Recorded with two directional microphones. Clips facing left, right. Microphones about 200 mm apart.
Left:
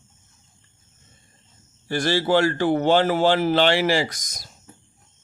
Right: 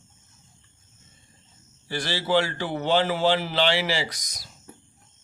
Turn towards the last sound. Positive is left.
turn(degrees=45)  # may be behind; listen again after turning